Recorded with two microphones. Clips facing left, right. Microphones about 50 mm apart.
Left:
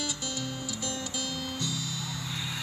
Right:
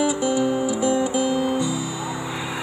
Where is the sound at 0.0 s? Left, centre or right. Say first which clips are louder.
Right 15 dB; centre.